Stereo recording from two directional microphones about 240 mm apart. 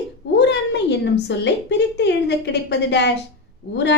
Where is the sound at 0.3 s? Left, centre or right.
Left.